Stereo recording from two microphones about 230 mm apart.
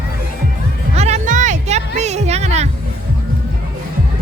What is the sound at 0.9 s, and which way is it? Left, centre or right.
Music, right.